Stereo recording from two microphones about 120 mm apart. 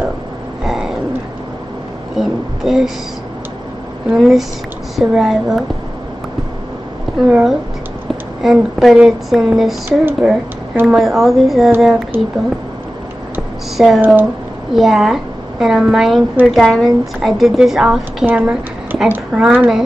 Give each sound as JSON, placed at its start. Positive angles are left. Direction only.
{"t": 0.7, "sound": "a sound", "side_deg": -5}
{"t": 2.1, "sound": "speech", "side_deg": 0}
{"t": 4.1, "sound": "a woman's voice", "side_deg": 0}
{"t": 7.2, "sound": "a woman's voice", "side_deg": -5}
{"t": 9.8, "sound": "a woman's voice", "side_deg": -15}
{"t": 11.0, "sound": "a woman's voice", "side_deg": 0}
{"t": 12.1, "sound": "a woman's voice", "side_deg": -15}
{"t": 13.7, "sound": "a woman's voice", "side_deg": 0}